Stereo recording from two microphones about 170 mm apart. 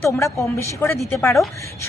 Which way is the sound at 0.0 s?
15° left (ahead or behind).